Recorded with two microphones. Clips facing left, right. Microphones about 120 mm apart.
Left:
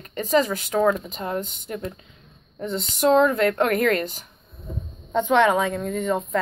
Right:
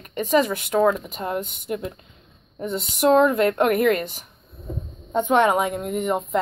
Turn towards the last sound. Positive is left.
turn(degrees=-15)  # may be behind; listen again after turning